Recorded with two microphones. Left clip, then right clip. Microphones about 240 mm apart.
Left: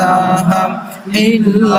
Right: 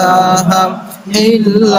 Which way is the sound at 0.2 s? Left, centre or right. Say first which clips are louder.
Right 3 dB; right.